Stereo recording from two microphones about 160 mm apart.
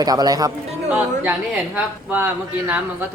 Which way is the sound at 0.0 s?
25° right (ahead or behind).